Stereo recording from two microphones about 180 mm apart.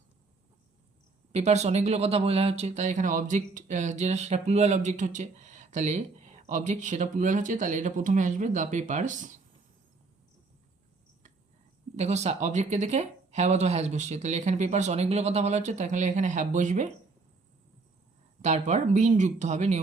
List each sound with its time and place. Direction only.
1.3 s speech: 40° right (ahead or behind)
11.9 s speech: 40° right (ahead or behind)
18.4 s speech: 40° right (ahead or behind)